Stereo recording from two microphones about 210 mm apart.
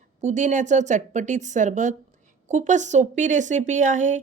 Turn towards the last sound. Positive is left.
turn(degrees=-35)  # may be behind; listen again after turning